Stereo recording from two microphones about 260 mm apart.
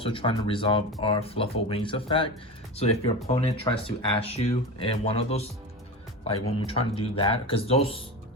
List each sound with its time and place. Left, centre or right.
0.0 s speech: centre